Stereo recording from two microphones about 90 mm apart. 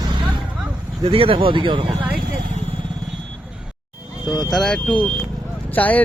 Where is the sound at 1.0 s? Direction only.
90° right; by 1.9 s 65° right (ahead or behind).